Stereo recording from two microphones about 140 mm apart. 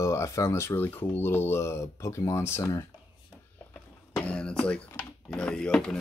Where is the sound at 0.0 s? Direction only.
20° left (ahead or behind).